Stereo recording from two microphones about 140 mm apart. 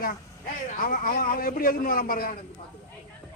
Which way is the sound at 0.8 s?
85° left.